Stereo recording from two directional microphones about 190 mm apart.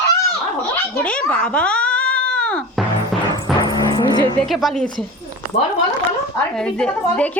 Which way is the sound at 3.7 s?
20° left (ahead or behind).